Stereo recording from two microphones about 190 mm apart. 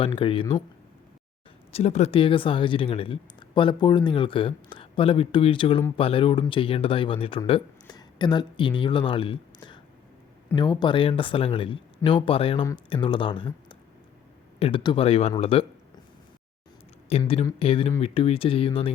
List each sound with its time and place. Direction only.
0.0 s speech: 30° left (ahead or behind)
1.7 s speech: 35° left (ahead or behind)
17.1 s speech: 30° left (ahead or behind)